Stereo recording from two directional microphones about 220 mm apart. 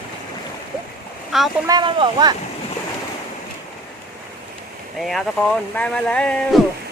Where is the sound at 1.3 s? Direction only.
Centre (ahead or behind).